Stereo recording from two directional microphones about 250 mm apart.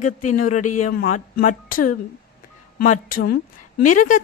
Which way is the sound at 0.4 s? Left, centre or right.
Left.